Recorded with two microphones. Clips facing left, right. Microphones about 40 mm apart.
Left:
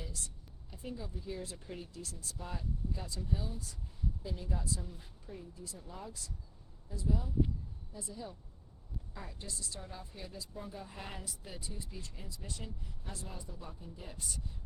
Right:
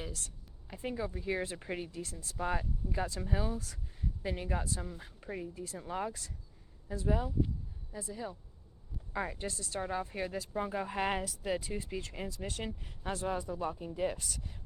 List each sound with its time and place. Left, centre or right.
0.0 s speech: right
1.6 s speech: right
1.9 s speech: right
2.4 s speech: right
5.2 s speech: right
9.1 s speech: right